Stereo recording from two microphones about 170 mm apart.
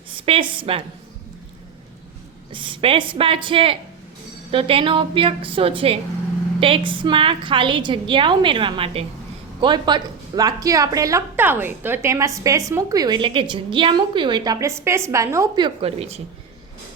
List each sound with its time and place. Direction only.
0.1 s a woman's voice: 30° right (ahead or behind)
2.5 s a woman's voice: 30° right (ahead or behind)
15.6 s a woman's voice: 35° right (ahead or behind)